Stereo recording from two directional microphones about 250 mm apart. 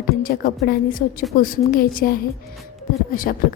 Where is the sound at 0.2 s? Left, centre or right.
Left.